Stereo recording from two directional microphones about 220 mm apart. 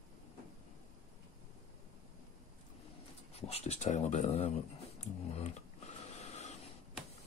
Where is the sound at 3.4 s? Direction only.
30° left (ahead or behind).